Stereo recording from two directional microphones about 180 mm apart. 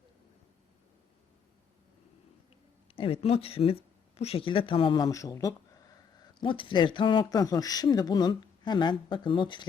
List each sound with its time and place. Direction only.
2.9 s speech: 30° left (ahead or behind)
6.4 s speech: 30° left (ahead or behind)